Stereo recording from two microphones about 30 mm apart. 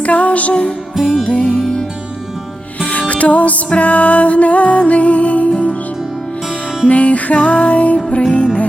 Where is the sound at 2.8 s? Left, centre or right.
Left.